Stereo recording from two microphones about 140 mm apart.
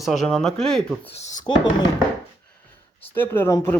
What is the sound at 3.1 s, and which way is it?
Speech, 15° left (ahead or behind).